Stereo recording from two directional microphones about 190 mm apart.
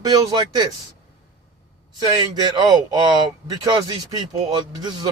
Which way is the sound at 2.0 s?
20° right (ahead or behind).